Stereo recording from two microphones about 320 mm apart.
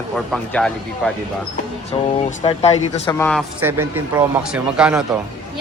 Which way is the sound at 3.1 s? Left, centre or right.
Centre.